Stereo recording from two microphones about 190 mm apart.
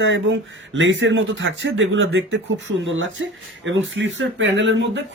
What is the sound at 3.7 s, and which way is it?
Speech, 80° right.